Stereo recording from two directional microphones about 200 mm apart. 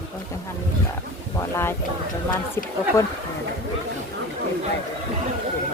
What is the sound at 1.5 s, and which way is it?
Speech, 10° left (ahead or behind).